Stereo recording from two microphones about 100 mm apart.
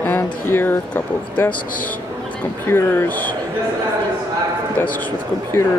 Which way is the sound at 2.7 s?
20° left (ahead or behind).